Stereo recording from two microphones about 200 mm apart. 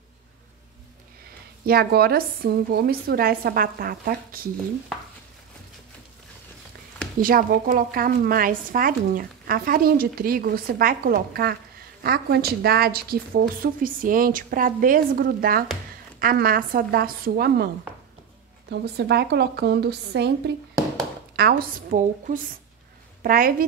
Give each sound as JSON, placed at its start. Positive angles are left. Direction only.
{"t": 1.7, "sound": "a woman's voice", "side_deg": -50}
{"t": 7.2, "sound": "a woman's voice", "side_deg": -45}
{"t": 18.7, "sound": "a woman's voice", "side_deg": -55}